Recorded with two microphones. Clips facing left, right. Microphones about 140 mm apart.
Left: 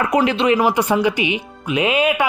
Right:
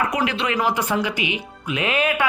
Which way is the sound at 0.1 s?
25° left (ahead or behind).